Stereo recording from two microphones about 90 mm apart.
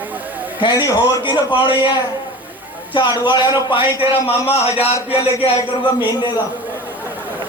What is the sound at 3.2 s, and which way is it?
Speech, 65° left (ahead or behind).